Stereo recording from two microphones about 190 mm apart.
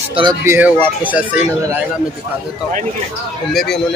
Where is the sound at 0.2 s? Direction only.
30° right (ahead or behind).